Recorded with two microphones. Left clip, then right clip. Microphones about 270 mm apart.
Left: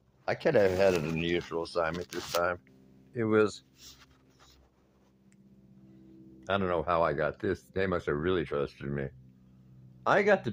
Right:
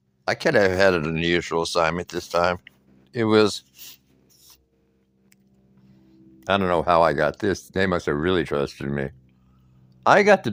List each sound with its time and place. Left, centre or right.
0.3 s speech: right
6.4 s speech: right